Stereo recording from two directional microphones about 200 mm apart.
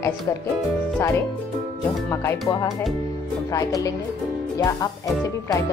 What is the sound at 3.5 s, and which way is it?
Speech, 15° left (ahead or behind).